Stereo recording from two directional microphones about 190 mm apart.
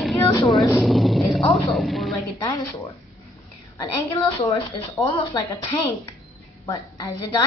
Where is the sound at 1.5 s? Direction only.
Centre (ahead or behind).